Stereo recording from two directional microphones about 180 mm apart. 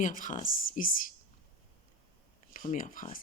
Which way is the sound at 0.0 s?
45° left (ahead or behind).